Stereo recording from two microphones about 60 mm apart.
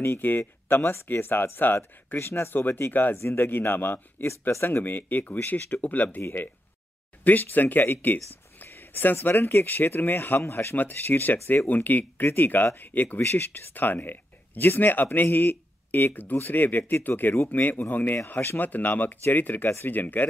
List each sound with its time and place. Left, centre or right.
0.0 s speech: left
2.1 s speech: left
4.3 s speech: left
4.6 s speech: left